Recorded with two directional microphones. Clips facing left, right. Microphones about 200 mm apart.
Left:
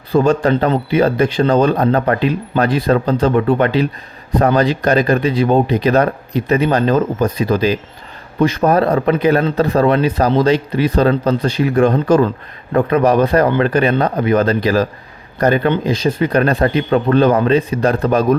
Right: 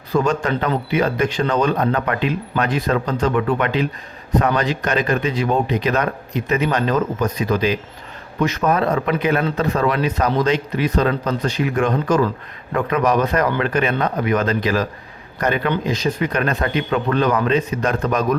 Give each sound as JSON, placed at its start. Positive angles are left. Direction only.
{"t": 0.1, "sound": "a man's voice", "side_deg": 30}